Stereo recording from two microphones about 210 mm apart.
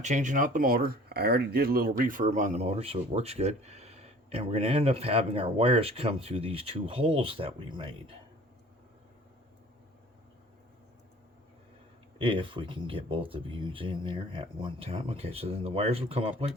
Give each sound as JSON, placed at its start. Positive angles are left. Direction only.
{"t": 0.0, "sound": "speech", "side_deg": -35}
{"t": 12.2, "sound": "speech", "side_deg": -25}